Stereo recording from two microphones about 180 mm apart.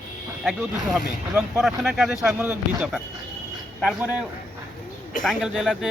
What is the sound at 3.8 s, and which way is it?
Speech, 5° right (ahead or behind).